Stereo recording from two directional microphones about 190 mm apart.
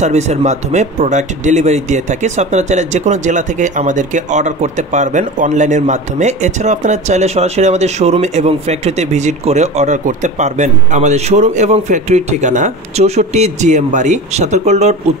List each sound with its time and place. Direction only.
0.0 s speech: 35° right (ahead or behind)